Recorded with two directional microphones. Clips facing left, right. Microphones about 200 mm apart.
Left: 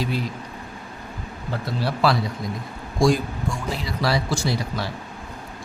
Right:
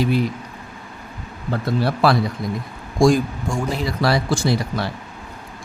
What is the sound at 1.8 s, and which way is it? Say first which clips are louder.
A man's voice: right 3 dB; 55° right (ahead or behind).